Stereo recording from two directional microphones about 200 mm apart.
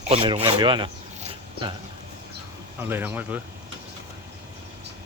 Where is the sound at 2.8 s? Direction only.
10° right (ahead or behind).